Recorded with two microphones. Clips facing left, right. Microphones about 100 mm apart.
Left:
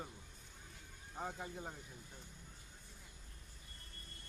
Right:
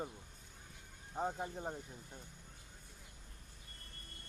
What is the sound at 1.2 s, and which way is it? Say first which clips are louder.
Speech: right 5 dB; 35° right (ahead or behind).